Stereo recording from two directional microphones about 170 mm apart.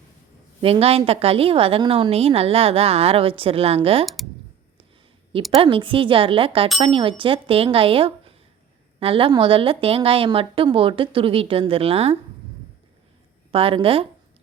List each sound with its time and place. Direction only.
0.6 s a woman's voice: 35° right (ahead or behind)
4.0 s speech: centre (ahead or behind)
5.5 s a woman's voice: 30° right (ahead or behind)
13.5 s a woman's voice: 35° right (ahead or behind)